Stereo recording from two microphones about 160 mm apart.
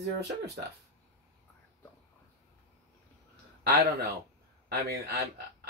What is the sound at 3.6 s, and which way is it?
Speech, 80° right.